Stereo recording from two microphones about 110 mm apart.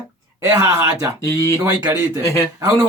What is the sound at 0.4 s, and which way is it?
Speech, 25° right (ahead or behind).